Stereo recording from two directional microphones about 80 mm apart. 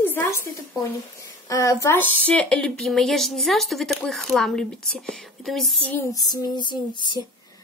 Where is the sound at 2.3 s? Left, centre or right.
Centre.